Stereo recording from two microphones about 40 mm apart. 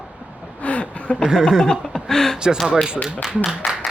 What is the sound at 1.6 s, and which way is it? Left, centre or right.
Chuckle, centre.